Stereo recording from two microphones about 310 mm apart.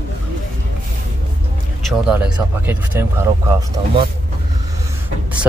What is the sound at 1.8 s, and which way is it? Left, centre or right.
Speech, centre.